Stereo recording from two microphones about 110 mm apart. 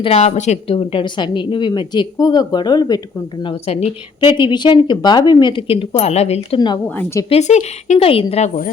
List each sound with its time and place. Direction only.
0.0 s a woman's voice: 70° left (ahead or behind); by 0.8 s 90° left
0.8 s speech: 50° left (ahead or behind)
3.4 s speech: 65° left (ahead or behind)
4.2 s speech: 50° left (ahead or behind); by 6.6 s 75° left (ahead or behind)
6.8 s speech: 15° left (ahead or behind)
7.3 s speech: 85° left; by 8.4 s 60° left (ahead or behind)